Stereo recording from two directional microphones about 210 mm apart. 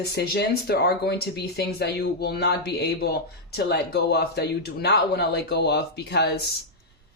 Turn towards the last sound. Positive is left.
turn(degrees=50)  # may be behind; listen again after turning